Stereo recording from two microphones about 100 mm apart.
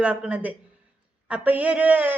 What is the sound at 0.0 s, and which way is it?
A woman's voice, 15° right (ahead or behind).